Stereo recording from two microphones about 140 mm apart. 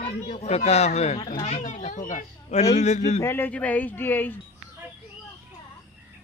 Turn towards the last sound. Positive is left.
turn(degrees=15)  # may be behind; listen again after turning